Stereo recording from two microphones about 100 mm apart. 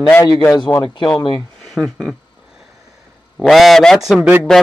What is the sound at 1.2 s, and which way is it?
Speech, 45° left (ahead or behind).